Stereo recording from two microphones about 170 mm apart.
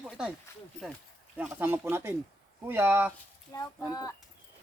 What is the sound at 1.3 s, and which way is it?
Speech, 10° right (ahead or behind).